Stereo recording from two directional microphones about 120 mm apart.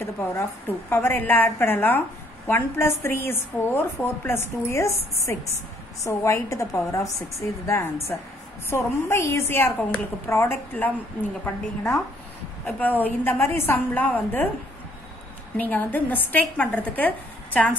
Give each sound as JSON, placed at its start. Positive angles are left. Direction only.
{"t": 0.0, "sound": "a woman's voice", "side_deg": 20}
{"t": 12.6, "sound": "a woman's voice", "side_deg": 15}
{"t": 15.5, "sound": "a woman's voice", "side_deg": 15}